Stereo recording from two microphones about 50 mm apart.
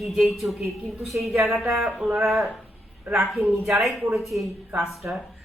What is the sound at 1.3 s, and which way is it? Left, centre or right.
Speech, right.